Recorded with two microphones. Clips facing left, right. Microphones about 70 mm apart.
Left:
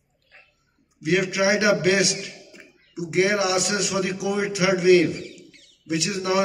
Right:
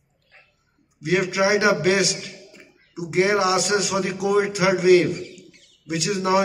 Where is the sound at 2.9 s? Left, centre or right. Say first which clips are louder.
Right 1 dB; right.